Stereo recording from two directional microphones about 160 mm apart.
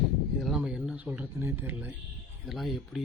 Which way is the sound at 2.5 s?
Centre (ahead or behind).